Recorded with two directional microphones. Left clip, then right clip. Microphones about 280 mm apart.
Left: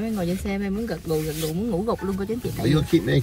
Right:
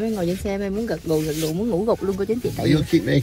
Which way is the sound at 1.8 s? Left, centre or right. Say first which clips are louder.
Right 5 dB; right.